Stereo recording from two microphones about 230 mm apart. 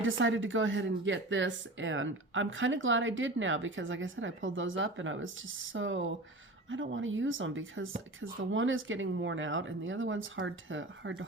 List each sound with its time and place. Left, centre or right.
0.0 s speech: right